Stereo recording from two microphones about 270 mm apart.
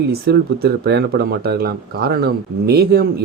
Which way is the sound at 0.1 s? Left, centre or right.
Right.